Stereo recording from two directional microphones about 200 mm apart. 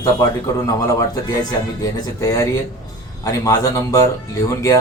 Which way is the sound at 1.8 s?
15° left (ahead or behind).